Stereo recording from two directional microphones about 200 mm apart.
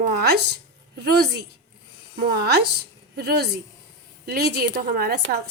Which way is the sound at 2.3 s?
55° right (ahead or behind).